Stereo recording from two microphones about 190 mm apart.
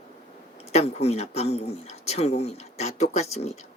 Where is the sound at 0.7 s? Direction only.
35° left (ahead or behind).